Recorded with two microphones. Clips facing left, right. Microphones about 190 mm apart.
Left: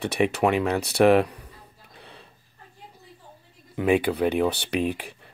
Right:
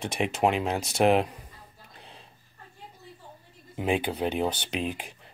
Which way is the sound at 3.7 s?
65° left (ahead or behind).